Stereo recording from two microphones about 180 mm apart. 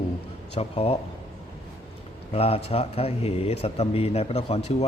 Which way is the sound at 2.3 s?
35° left (ahead or behind).